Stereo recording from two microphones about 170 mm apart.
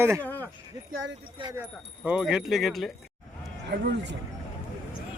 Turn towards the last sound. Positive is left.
turn(degrees=-80)